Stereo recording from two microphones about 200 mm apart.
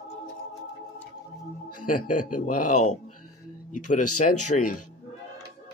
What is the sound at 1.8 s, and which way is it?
A man's voice, 40° left (ahead or behind).